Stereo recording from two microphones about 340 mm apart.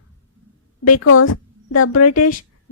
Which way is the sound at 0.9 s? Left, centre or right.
Left.